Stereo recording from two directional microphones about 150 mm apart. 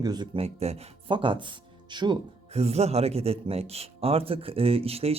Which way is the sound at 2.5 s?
45° right (ahead or behind).